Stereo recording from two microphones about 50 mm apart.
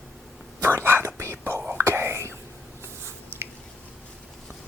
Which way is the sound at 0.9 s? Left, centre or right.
Right.